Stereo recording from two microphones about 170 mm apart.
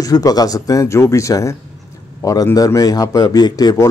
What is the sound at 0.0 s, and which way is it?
A man's voice, 20° left (ahead or behind).